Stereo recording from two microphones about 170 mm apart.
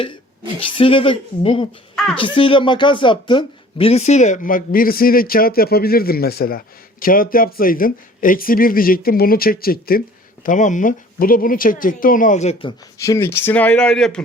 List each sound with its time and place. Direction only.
0.8 s speech: 30° left (ahead or behind); by 10.0 s 60° left (ahead or behind)
10.4 s speech: 50° left (ahead or behind)
13.0 s speech: 15° left (ahead or behind)